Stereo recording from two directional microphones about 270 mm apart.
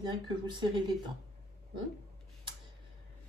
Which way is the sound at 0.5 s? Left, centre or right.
Centre.